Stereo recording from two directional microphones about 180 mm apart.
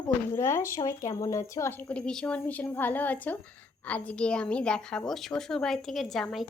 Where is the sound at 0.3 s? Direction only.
15° left (ahead or behind).